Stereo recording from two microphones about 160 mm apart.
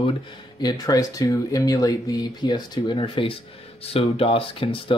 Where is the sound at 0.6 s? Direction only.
25° left (ahead or behind).